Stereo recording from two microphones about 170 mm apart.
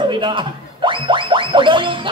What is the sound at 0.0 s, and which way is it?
A man's voice, 30° right (ahead or behind).